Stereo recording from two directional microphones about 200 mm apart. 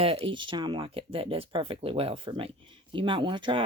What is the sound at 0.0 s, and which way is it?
Speech, 30° right (ahead or behind).